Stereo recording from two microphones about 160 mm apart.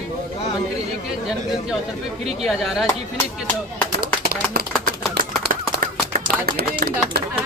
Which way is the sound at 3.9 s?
65° right (ahead or behind).